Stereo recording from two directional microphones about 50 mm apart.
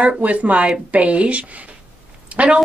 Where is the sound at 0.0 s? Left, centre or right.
Right.